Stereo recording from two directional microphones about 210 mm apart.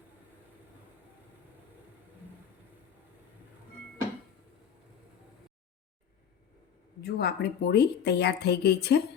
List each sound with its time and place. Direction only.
7.0 s a woman's voice: 50° left (ahead or behind)